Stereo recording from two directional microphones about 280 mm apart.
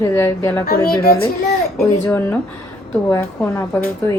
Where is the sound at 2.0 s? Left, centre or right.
Centre.